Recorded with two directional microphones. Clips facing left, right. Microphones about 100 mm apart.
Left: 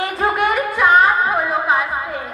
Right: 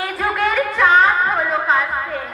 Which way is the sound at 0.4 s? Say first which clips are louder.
Right 2 dB; 10° left (ahead or behind).